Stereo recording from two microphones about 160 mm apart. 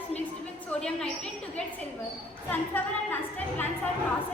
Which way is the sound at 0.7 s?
5° left (ahead or behind).